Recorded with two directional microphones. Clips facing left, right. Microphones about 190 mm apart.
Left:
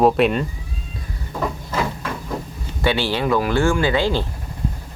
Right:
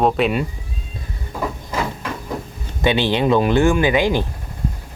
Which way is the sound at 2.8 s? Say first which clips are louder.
Right 3 dB; 20° right (ahead or behind).